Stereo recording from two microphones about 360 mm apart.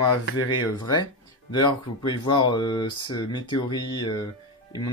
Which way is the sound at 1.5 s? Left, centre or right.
Centre.